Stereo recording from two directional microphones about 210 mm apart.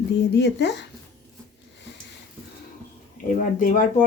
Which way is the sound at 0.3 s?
55° left (ahead or behind).